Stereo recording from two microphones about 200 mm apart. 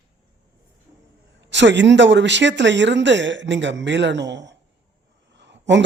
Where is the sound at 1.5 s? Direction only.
65° right (ahead or behind).